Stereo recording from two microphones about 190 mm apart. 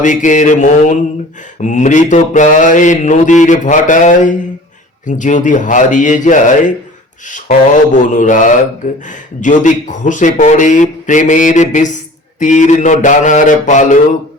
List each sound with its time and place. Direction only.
0.0 s speech: 40° left (ahead or behind)